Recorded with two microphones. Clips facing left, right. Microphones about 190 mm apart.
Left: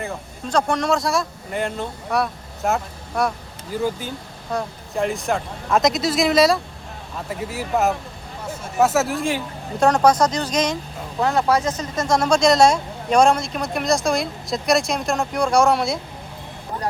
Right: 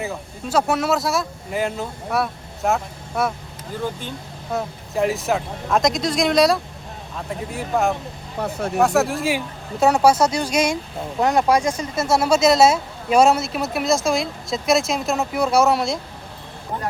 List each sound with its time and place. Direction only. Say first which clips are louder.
0.0 s speech: right 1 dB; 5° right (ahead or behind)
4.5 s speech: right 1 dB; 5° right (ahead or behind)
8.4 s speech: right 8 dB; 65° right (ahead or behind)
8.8 s speech: even; centre (ahead or behind)